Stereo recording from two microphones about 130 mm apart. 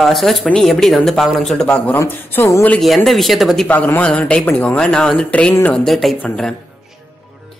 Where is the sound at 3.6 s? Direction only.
10° left (ahead or behind).